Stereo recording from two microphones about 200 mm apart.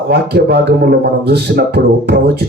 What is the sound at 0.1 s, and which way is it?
Speech, 55° right (ahead or behind).